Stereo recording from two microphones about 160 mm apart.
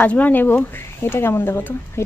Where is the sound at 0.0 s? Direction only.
10° left (ahead or behind).